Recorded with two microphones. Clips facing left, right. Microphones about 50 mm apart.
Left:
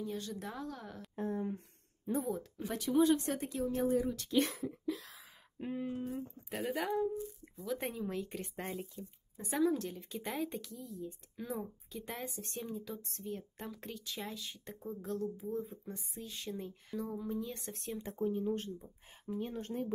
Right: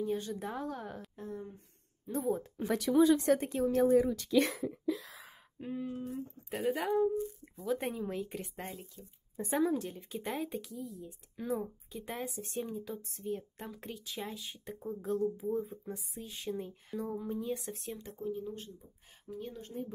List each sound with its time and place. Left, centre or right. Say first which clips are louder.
0.0 s a woman's voice: right 5 dB; right
1.1 s speech: left 11 dB; left
2.3 s a woman's voice: right 4 dB; right
2.7 s speech: right 3 dB; right
3.3 s speech: right 4 dB; right
3.7 s speech: right 7 dB; right
5.6 s a sound: even; centre
6.1 s speech: right 1 dB; centre
8.7 s speech: left 5 dB; left
9.4 s speech: right 2 dB; right
9.8 s speech: right 2 dB; centre
18.1 s speech: left 5 dB; left
19.5 s speech: left 3 dB; left